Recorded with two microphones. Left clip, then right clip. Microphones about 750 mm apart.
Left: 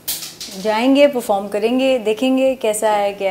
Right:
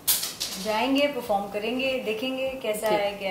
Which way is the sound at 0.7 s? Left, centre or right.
Left.